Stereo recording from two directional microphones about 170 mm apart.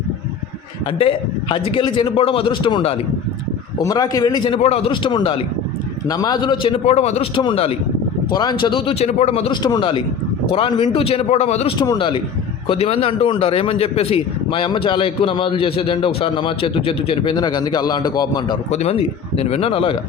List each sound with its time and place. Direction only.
0.9 s a man's voice: 30° left (ahead or behind)
8.3 s a man's voice: 25° left (ahead or behind)
9.6 s a man's voice: 25° left (ahead or behind); by 11.7 s 40° left (ahead or behind)
11.8 s a man's voice: 25° left (ahead or behind)
18.7 s a man's voice: 40° left (ahead or behind)